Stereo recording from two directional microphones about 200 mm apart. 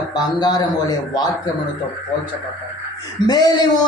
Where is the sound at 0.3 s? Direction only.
20° left (ahead or behind).